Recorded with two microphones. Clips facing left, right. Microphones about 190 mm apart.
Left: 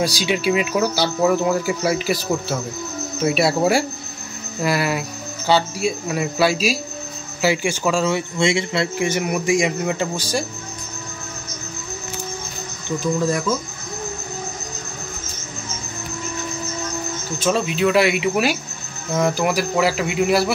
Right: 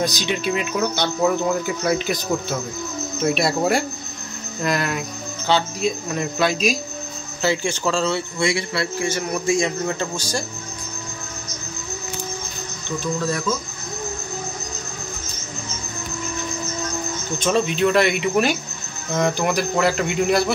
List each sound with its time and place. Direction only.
0.0 s speech: 10° left (ahead or behind)
8.4 s speech: 25° left (ahead or behind)
17.4 s speech: 5° left (ahead or behind)